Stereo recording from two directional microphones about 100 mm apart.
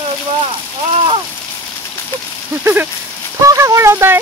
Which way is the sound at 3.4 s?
30° right (ahead or behind).